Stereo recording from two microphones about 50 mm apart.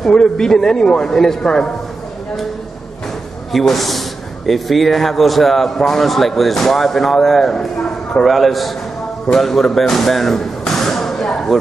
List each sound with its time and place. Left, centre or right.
0.0 s a man's voice: centre
3.5 s speech: centre
11.2 s a sound: centre